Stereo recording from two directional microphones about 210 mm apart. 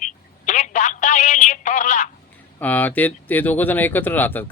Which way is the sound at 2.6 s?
10° left (ahead or behind).